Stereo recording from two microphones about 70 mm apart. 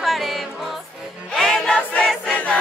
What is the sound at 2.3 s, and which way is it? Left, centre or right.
Choir, centre.